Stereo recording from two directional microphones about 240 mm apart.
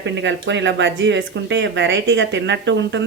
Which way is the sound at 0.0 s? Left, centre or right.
Right.